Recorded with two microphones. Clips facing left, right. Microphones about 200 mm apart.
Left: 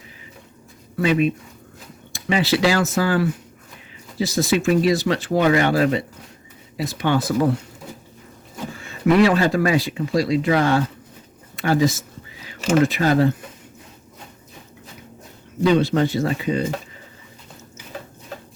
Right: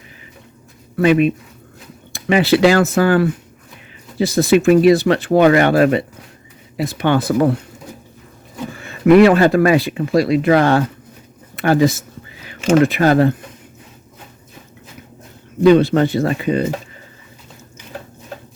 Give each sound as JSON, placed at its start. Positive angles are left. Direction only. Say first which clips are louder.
{"t": 0.9, "sound": "speech", "louder": "right 6 dB", "side_deg": -60}
{"t": 8.8, "sound": "speech", "louder": "right 7 dB", "side_deg": -60}
{"t": 15.6, "sound": "speech", "louder": "right 6 dB", "side_deg": -60}